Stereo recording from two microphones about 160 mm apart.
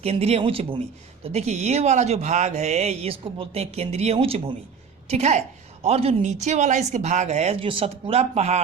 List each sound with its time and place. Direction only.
0.0 s speech: 40° right (ahead or behind)